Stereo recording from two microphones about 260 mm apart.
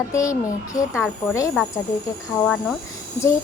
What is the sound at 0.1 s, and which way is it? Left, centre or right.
A child's voice, centre.